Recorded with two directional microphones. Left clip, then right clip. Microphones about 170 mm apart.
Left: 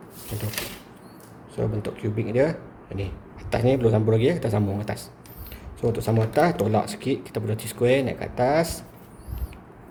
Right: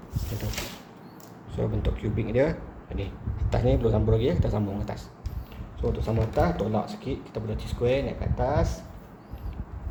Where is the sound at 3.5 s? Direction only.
25° left (ahead or behind).